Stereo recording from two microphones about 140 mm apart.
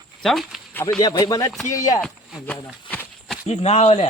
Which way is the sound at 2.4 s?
10° left (ahead or behind).